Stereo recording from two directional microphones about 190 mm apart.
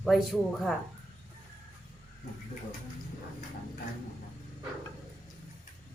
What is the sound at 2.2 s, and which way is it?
Speech, 40° left (ahead or behind).